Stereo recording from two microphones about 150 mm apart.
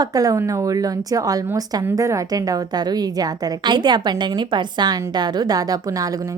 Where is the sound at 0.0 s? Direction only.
25° right (ahead or behind).